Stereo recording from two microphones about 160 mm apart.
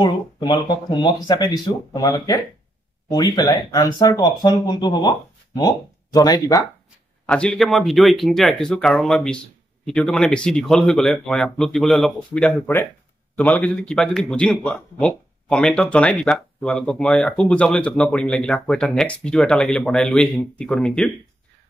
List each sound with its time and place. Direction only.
0.0 s speech: 30° left (ahead or behind)
7.2 s speech: 5° left (ahead or behind)